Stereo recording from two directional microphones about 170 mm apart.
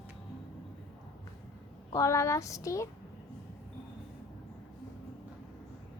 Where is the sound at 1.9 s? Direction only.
20° left (ahead or behind).